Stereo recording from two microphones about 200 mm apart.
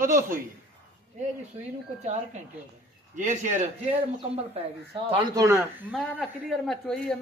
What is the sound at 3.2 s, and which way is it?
Speech, 40° right (ahead or behind).